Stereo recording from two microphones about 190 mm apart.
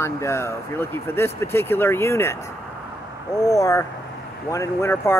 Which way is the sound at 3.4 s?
20° left (ahead or behind).